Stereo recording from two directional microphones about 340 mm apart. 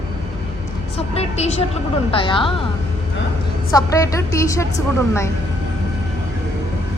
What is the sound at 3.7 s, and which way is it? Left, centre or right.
A woman's voice, centre.